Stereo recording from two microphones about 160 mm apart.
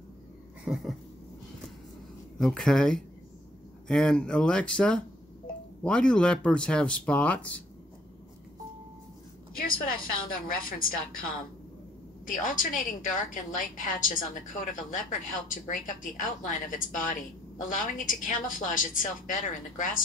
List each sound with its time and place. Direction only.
0.7 s dog: 10° right (ahead or behind)
2.3 s speech: 5° left (ahead or behind)
9.6 s a woman's voice: 60° left (ahead or behind)
12.3 s a woman's voice: 55° left (ahead or behind)